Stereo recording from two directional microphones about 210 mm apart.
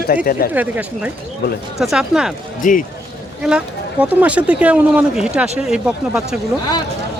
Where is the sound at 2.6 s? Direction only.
40° left (ahead or behind).